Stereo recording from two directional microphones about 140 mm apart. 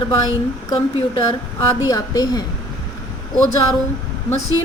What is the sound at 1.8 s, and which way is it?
Speech, 30° left (ahead or behind).